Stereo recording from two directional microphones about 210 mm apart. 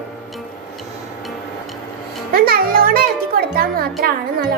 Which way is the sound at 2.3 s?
45° right (ahead or behind).